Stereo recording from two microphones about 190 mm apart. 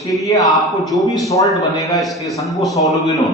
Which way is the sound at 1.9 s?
Centre (ahead or behind).